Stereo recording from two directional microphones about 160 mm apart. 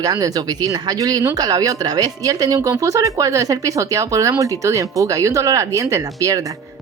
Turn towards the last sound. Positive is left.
turn(degrees=-20)  # may be behind; listen again after turning